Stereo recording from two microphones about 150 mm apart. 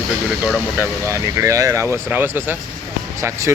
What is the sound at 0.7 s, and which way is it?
Speech, 20° right (ahead or behind).